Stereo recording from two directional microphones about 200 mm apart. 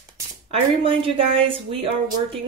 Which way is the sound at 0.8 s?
25° right (ahead or behind).